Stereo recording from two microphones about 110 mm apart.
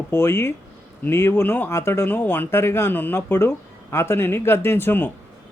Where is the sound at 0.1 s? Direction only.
25° left (ahead or behind).